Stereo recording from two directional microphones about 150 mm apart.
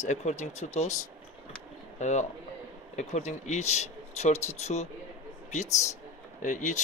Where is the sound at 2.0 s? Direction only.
50° left (ahead or behind).